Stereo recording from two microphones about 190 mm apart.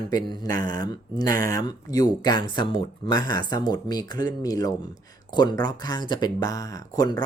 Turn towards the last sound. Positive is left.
turn(degrees=20)  # may be behind; listen again after turning